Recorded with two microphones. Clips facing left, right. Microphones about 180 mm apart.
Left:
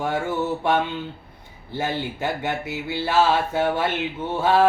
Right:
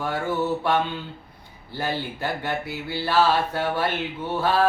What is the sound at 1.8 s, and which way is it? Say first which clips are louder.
Speech: left 2 dB; 20° left (ahead or behind).